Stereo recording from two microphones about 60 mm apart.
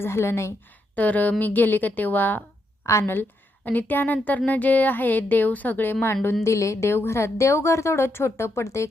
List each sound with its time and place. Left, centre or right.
0.0 s a woman's voice: left
0.9 s speech: left
2.8 s a woman's voice: left
3.6 s speech: left
6.4 s a woman's voice: left